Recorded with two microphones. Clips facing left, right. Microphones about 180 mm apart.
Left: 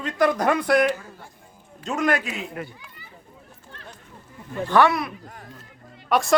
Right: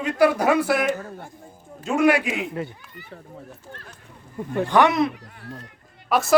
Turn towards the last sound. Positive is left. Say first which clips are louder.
# even
turn(degrees=0)  # may be behind; listen again after turning